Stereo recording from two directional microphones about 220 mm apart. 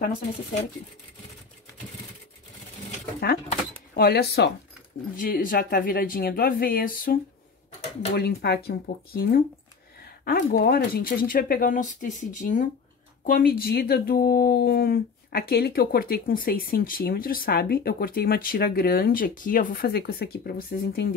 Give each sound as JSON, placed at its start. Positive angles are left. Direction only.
{"t": 3.9, "sound": "speech", "side_deg": 45}